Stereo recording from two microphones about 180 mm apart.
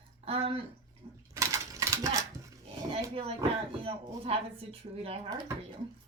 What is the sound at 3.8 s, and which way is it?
Speech, 30° right (ahead or behind).